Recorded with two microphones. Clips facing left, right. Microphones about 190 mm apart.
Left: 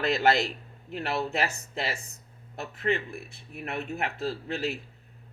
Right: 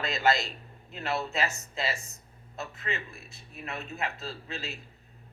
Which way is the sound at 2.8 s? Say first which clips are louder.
Left 12 dB; 60° left (ahead or behind).